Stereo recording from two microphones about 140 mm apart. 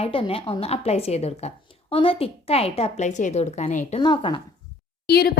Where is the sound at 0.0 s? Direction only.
40° left (ahead or behind); by 4.0 s 55° left (ahead or behind).